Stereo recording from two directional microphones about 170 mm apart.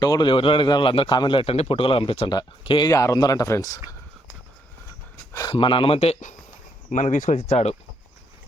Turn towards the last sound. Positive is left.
turn(degrees=40)  # may be behind; listen again after turning